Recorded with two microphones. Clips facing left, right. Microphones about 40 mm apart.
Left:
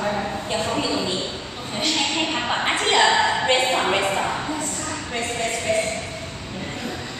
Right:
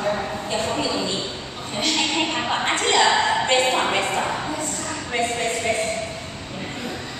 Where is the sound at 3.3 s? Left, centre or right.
Centre.